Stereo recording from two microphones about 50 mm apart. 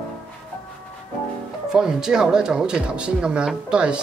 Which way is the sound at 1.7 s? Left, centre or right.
Centre.